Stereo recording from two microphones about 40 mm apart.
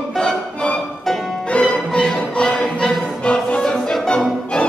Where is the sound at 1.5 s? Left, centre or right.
Centre.